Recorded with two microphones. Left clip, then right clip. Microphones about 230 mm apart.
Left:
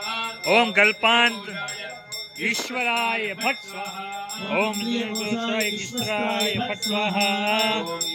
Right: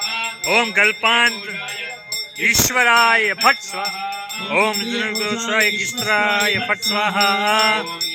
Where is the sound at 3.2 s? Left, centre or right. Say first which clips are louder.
Right 10 dB; right.